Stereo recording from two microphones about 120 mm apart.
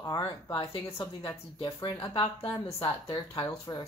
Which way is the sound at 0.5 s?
50° left (ahead or behind).